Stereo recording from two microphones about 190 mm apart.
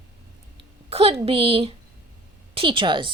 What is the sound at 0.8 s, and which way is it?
A woman's voice, 30° right (ahead or behind).